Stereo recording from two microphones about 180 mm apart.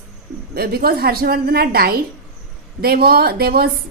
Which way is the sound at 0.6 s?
55° right (ahead or behind).